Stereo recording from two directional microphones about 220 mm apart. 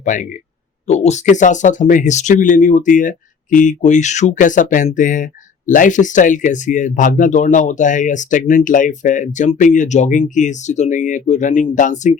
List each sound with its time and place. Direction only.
0.0 s speech: 35° left (ahead or behind)